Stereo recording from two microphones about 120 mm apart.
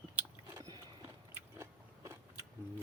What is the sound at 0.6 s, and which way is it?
Clip-clop, 35° right (ahead or behind).